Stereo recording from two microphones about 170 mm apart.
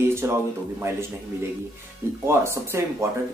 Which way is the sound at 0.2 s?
15° right (ahead or behind).